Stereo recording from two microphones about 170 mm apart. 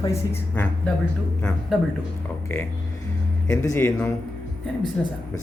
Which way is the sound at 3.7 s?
10° left (ahead or behind).